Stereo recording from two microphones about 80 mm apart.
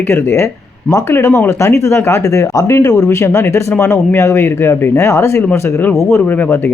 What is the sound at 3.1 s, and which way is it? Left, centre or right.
Speech, left.